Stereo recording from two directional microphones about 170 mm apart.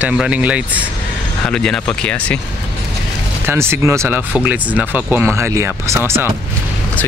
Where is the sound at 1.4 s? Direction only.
5° left (ahead or behind).